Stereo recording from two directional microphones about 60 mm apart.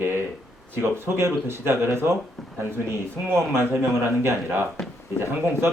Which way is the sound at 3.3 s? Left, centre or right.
Right.